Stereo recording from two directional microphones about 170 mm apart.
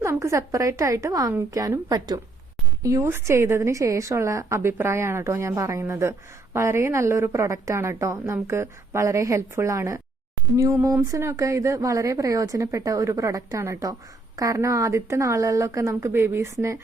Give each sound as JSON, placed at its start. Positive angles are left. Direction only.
{"t": 0.0, "sound": "a woman's voice", "side_deg": -15}